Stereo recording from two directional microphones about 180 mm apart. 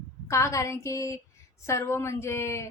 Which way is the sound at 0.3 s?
15° left (ahead or behind).